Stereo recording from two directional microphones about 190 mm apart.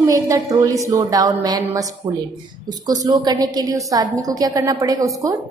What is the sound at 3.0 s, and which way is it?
A woman's voice, 20° right (ahead or behind).